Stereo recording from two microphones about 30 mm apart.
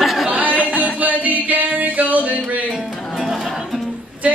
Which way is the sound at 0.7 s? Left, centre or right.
Right.